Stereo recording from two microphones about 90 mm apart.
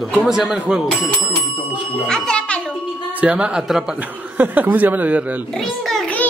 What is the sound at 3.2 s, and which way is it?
Speech, 15° right (ahead or behind).